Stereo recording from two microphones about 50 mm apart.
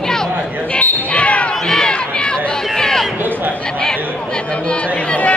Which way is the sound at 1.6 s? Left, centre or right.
Centre.